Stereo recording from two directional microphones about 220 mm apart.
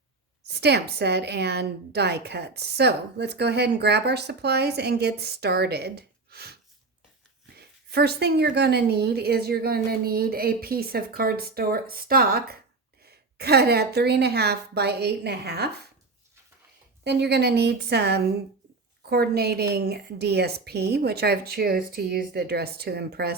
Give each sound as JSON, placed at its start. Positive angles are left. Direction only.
{"t": 0.4, "sound": "a woman's voice", "side_deg": -50}
{"t": 17.0, "sound": "a woman's voice", "side_deg": -50}